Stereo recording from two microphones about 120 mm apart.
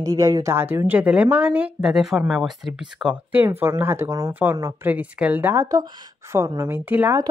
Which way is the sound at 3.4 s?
20° right (ahead or behind).